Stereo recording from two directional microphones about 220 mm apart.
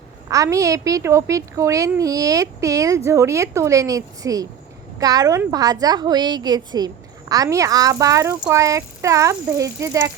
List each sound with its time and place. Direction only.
0.3 s a woman's voice: 15° right (ahead or behind)